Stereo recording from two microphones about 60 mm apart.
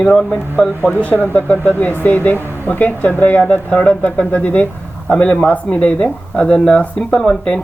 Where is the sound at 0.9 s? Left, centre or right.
Left.